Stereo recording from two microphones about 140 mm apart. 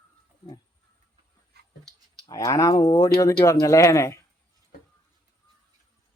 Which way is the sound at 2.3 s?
25° left (ahead or behind).